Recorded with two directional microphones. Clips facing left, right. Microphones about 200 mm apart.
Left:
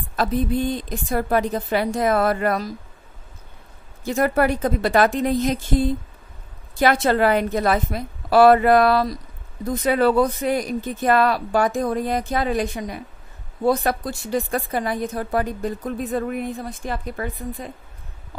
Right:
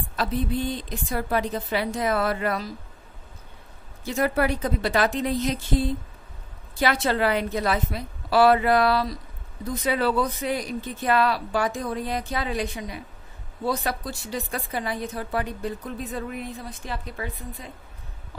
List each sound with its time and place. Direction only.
0.1 s speech: 50° left (ahead or behind)
4.0 s speech: 50° left (ahead or behind)
6.8 s speech: 50° left (ahead or behind)